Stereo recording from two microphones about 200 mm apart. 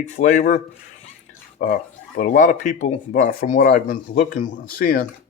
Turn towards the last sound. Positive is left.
turn(degrees=45)  # may be behind; listen again after turning